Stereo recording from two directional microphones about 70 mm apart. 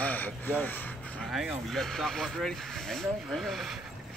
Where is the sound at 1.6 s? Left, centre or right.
Centre.